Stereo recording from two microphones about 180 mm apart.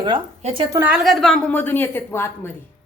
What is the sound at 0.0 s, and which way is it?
Speech, 25° right (ahead or behind).